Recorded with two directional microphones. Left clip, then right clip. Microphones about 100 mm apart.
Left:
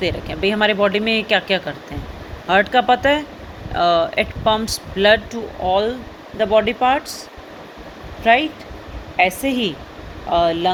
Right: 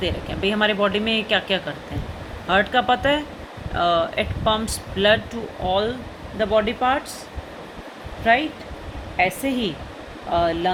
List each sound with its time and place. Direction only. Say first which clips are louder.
0.0 s speech: left 4 dB; 40° left (ahead or behind)
5.3 s speech: left 4 dB; 30° left (ahead or behind)
8.2 s speech: left 4 dB; 40° left (ahead or behind)